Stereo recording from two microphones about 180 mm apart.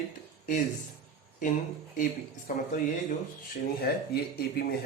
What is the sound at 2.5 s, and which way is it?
Speech, 50° left (ahead or behind).